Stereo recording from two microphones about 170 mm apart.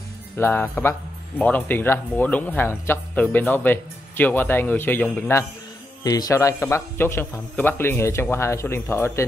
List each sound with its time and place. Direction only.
0.4 s speech: 10° left (ahead or behind)
6.0 s speech: 20° left (ahead or behind)